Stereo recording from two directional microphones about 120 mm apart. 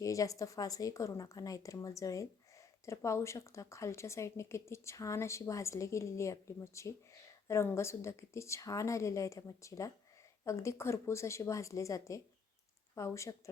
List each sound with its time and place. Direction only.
0.0 s speech: 30° left (ahead or behind)